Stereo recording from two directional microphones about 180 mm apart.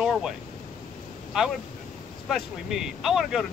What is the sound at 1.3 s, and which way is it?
Speech, centre (ahead or behind).